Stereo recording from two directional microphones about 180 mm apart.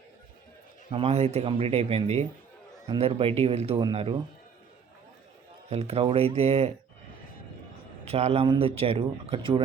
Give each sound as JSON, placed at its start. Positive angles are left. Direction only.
{"t": 0.9, "sound": "speech", "side_deg": -30}
{"t": 5.7, "sound": "speech", "side_deg": -35}
{"t": 8.0, "sound": "speech", "side_deg": -35}